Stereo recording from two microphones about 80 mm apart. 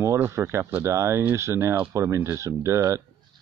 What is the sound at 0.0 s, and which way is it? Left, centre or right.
Speech, right.